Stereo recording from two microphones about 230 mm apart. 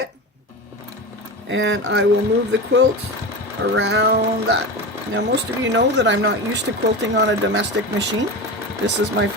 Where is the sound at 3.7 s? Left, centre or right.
Right.